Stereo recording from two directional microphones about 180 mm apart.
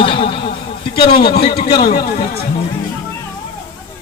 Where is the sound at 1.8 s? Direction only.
60° left (ahead or behind).